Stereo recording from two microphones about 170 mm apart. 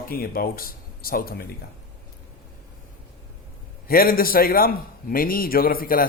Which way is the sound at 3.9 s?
60° left (ahead or behind).